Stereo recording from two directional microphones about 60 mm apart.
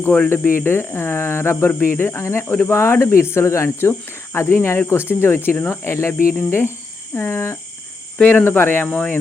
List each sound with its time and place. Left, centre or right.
0.3 s speech: left
6.3 s speech: left
8.2 s speech: centre
8.4 s speech: left